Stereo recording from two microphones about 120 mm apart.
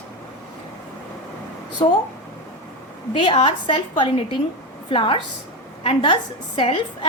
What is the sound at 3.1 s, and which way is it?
A woman's voice, 45° left (ahead or behind).